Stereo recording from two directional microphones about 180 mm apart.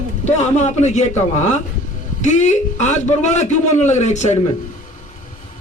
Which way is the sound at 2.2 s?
40° left (ahead or behind).